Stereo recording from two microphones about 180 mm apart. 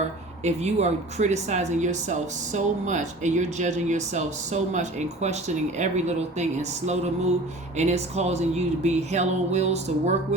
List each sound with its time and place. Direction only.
0.4 s speech: 40° right (ahead or behind)